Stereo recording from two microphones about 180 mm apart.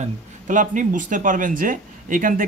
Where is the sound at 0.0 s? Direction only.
45° right (ahead or behind).